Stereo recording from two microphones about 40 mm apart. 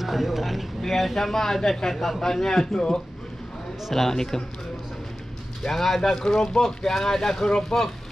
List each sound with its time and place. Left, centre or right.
0.0 s speech: centre
3.9 s speech: centre
5.6 s speech: centre